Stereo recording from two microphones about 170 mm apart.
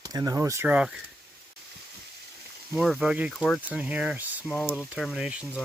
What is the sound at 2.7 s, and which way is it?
Speech, 5° right (ahead or behind).